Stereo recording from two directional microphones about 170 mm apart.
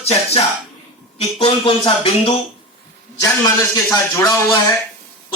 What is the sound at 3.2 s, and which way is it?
Speech, 20° left (ahead or behind).